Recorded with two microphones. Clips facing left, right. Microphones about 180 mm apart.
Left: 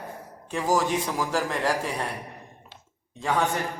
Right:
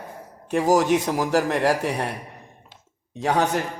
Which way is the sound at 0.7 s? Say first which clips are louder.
Right 4 dB; 70° right (ahead or behind).